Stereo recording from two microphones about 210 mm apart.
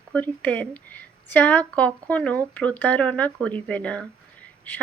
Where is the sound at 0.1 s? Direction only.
5° left (ahead or behind).